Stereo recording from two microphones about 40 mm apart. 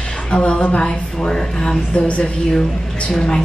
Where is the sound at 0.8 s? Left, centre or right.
Centre; by 2.3 s left.